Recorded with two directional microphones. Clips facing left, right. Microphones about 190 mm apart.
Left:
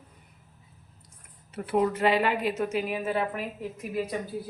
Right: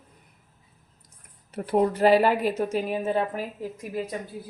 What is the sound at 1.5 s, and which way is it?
Speech, 40° right (ahead or behind).